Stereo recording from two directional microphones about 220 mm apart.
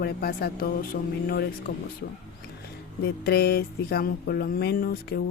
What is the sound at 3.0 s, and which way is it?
Speech, 45° left (ahead or behind).